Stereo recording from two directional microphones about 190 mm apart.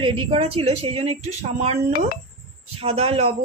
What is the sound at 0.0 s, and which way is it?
Speech, 30° right (ahead or behind).